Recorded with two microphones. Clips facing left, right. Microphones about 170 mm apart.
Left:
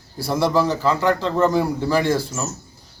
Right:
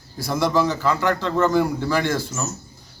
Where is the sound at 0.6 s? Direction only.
30° left (ahead or behind).